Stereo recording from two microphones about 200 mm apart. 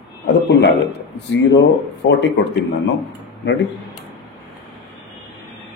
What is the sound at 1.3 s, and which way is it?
A man's voice, 60° left (ahead or behind).